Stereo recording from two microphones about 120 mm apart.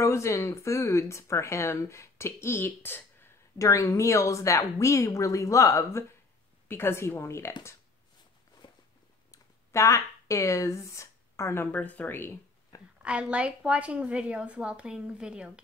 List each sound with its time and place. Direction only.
0.0 s speech: 25° left (ahead or behind)
8.6 s a sound: 45° left (ahead or behind)
9.3 s speech: 25° left (ahead or behind)
13.0 s a woman's voice: 10° right (ahead or behind)